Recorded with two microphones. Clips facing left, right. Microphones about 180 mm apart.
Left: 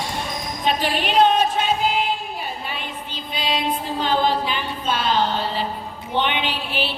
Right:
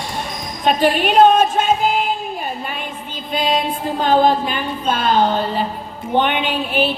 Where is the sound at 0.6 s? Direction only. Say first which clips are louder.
Right 7 dB; 50° right (ahead or behind).